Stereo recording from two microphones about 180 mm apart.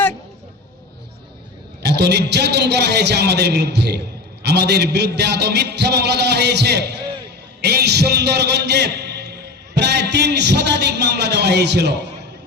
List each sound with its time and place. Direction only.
1.8 s a man's voice: 65° right (ahead or behind)